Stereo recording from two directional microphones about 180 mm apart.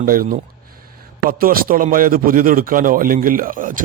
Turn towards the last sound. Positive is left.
turn(degrees=-50)  # may be behind; listen again after turning